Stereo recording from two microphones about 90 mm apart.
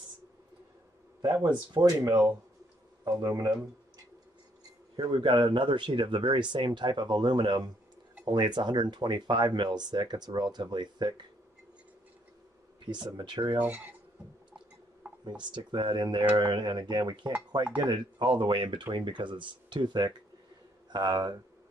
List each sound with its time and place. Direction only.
1.7 s speech: 45° right (ahead or behind)
3.2 s speech: 45° right (ahead or behind)
4.9 s speech: 55° right (ahead or behind)
12.8 s speech: 55° right (ahead or behind)
13.6 s speech: 15° right (ahead or behind)
15.2 s speech: 55° right (ahead or behind)